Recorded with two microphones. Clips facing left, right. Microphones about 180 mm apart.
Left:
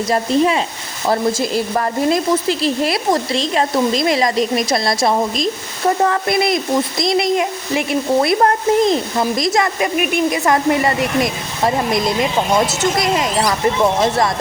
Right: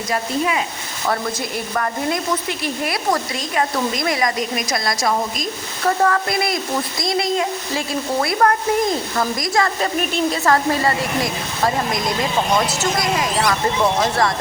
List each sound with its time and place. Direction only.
0.1 s speech: 35° left (ahead or behind)
1.7 s speech: 25° left (ahead or behind)